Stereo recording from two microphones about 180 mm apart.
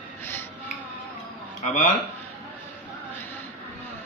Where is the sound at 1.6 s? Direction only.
40° left (ahead or behind).